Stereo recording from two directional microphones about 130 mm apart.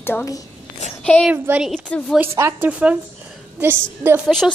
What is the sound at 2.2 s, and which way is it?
Speech, 20° right (ahead or behind).